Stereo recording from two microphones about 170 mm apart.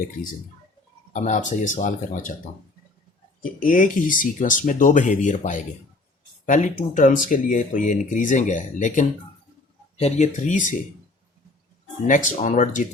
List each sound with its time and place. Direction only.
1.1 s speech: 45° left (ahead or behind)
3.4 s speech: 55° left (ahead or behind)
12.0 s speech: 50° left (ahead or behind)